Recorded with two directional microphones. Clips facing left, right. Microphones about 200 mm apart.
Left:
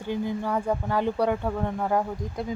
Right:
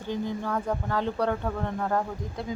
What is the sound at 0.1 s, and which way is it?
Speech, 10° left (ahead or behind).